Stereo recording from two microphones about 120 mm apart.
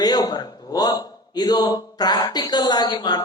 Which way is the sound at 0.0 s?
35° left (ahead or behind).